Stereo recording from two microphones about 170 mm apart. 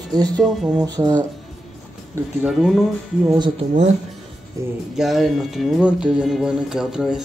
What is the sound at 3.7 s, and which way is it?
Speech, 45° right (ahead or behind).